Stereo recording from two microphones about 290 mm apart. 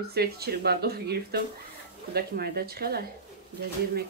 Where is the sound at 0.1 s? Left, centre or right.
Right.